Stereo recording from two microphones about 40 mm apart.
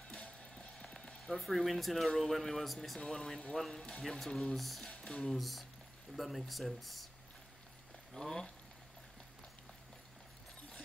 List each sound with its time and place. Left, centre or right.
0.1 s music: left
0.8 s music: centre
1.4 s speech: centre
4.3 s speech: centre
4.6 s speech: centre
5.0 s speech: centre
5.3 s speech: centre
8.1 s speech: centre